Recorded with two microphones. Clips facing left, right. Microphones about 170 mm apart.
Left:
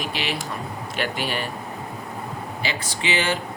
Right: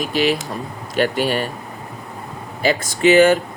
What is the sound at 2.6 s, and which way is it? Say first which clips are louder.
Speech: right 13 dB; 45° right (ahead or behind).